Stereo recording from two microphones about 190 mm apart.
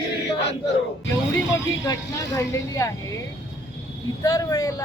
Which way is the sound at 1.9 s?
15° left (ahead or behind).